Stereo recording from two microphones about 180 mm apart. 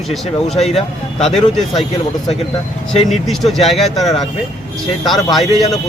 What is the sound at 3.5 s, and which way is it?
Speech, centre (ahead or behind).